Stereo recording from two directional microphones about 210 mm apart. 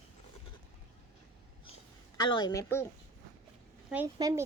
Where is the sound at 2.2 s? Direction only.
20° left (ahead or behind).